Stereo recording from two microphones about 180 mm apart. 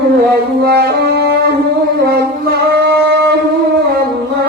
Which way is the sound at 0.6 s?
65° right (ahead or behind).